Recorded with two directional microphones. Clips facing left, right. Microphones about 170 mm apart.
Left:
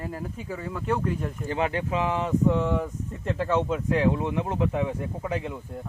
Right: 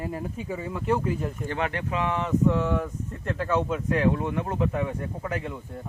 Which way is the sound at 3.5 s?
15° left (ahead or behind).